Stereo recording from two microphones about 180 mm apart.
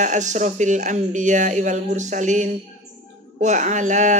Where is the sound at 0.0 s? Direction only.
40° right (ahead or behind).